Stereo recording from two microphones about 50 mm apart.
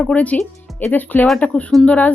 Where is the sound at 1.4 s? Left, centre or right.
Left.